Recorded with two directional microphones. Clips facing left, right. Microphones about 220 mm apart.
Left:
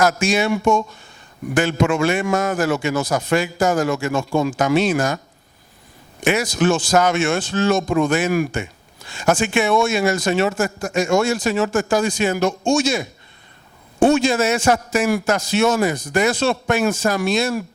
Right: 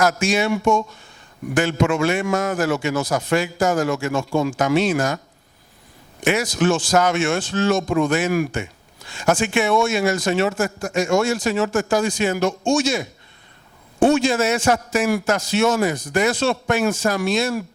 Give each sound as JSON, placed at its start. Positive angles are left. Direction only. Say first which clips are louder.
{"t": 0.0, "sound": "a man's voice", "louder": "left 1 dB", "side_deg": 15}
{"t": 6.2, "sound": "a man's voice", "louder": "left 1 dB", "side_deg": 10}
{"t": 8.1, "sound": "a man's voice", "louder": "left 1 dB", "side_deg": 15}
{"t": 14.2, "sound": "a man's voice", "louder": "left 1 dB", "side_deg": 15}